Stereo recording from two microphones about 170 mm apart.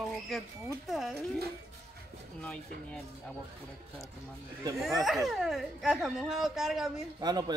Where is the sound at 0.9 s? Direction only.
Centre (ahead or behind).